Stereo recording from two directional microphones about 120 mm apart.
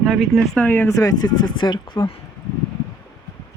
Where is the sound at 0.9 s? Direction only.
30° left (ahead or behind).